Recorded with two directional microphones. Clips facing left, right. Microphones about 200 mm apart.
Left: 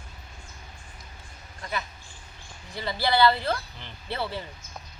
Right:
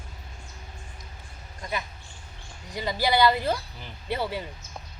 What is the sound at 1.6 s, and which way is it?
Speech, 15° right (ahead or behind).